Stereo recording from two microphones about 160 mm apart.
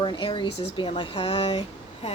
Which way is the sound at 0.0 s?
30° left (ahead or behind).